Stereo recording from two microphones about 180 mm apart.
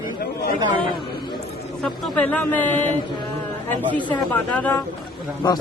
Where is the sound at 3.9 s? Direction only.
10° left (ahead or behind).